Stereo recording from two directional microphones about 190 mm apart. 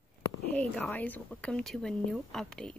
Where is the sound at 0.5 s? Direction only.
5° left (ahead or behind).